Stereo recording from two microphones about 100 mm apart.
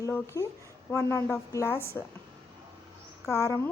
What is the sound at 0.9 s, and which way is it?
Speech, 25° left (ahead or behind).